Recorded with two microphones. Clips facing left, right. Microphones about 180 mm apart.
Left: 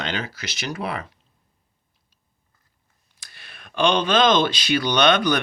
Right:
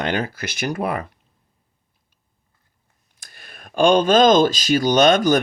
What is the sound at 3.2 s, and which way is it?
Speech, 50° right (ahead or behind).